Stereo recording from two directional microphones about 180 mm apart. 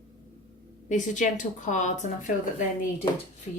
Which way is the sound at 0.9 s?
45° left (ahead or behind).